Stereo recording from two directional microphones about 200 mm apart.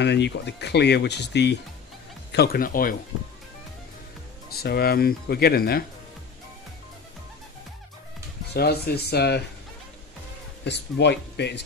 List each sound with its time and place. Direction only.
0.0 s speech: 60° left (ahead or behind)
4.5 s speech: 50° left (ahead or behind)
8.5 s speech: 50° left (ahead or behind)
10.6 s speech: 60° left (ahead or behind)